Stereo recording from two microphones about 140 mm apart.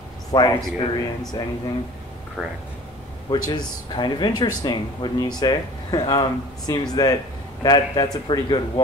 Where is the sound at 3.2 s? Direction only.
30° left (ahead or behind).